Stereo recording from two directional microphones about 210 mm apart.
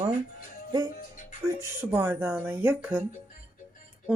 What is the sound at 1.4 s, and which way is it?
Speech, 10° right (ahead or behind).